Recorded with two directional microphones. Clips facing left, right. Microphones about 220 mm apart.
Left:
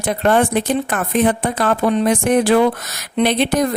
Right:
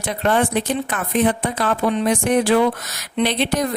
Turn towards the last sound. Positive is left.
turn(degrees=50)  # may be behind; listen again after turning